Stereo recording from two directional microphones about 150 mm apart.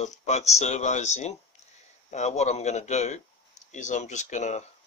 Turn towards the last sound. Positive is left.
turn(degrees=50)  # may be behind; listen again after turning